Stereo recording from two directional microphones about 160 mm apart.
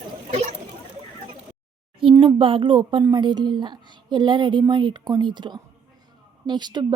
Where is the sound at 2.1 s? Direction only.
25° right (ahead or behind).